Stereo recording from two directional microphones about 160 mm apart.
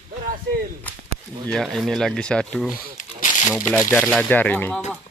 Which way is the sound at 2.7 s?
55° left (ahead or behind).